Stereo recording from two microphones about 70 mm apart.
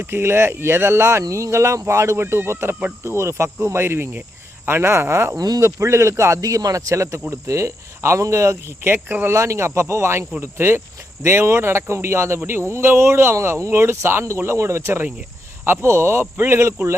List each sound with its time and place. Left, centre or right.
0.0 s speech: right
9.3 s speech: right